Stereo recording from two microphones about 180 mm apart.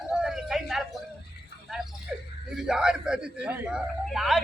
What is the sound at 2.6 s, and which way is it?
A man's voice, 5° right (ahead or behind).